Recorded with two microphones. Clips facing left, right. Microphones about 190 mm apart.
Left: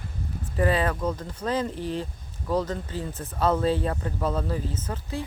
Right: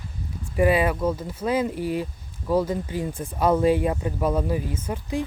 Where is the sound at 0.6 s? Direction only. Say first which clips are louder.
Right 4 dB; 10° right (ahead or behind).